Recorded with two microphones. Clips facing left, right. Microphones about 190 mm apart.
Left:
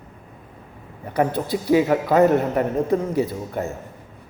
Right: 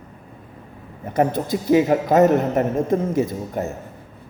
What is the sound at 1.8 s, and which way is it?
Speech, 35° right (ahead or behind).